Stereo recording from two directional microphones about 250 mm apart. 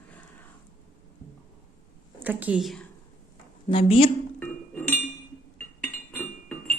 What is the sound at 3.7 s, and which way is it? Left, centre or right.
Speech, left.